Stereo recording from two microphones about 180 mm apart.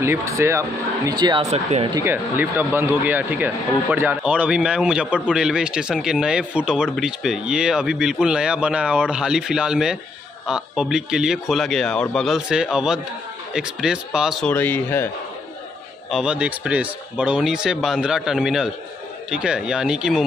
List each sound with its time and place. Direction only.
0.0 s speech: 15° right (ahead or behind)
1.5 s speech: 35° right (ahead or behind)
2.0 s speech: 10° right (ahead or behind)
14.5 s speech: 10° left (ahead or behind)
16.1 s speech: 5° right (ahead or behind)